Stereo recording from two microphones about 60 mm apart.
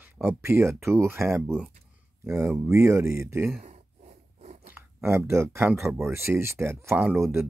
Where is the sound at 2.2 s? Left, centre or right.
Right.